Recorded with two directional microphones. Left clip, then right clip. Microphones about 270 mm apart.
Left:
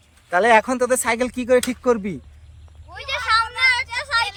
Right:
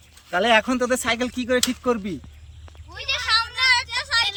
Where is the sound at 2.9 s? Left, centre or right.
Centre.